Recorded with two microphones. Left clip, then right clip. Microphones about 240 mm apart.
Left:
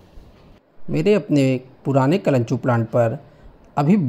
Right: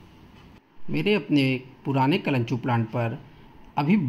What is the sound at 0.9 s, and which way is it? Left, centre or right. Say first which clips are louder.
A man's voice: left 6 dB; centre.